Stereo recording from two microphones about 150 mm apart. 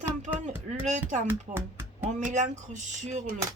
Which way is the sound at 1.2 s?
15° right (ahead or behind).